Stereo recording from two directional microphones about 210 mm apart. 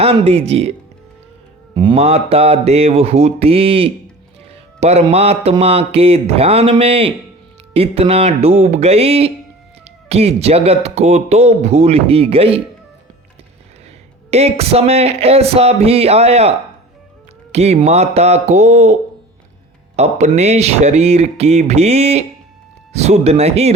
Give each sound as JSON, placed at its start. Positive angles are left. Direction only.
{"t": 0.0, "sound": "speech", "side_deg": -30}
{"t": 1.7, "sound": "speech", "side_deg": -25}
{"t": 14.3, "sound": "speech", "side_deg": -30}
{"t": 20.0, "sound": "speech", "side_deg": -30}